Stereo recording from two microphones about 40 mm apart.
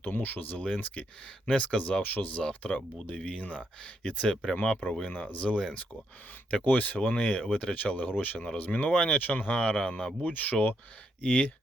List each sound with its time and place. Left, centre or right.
0.0 s speech: left
0.6 s speech: left
2.0 s speech: left
2.5 s speech: left
4.0 s speech: centre
5.0 s speech: left
6.7 s speech: left
10.0 s speech: centre
10.2 s speech: left
11.2 s speech: left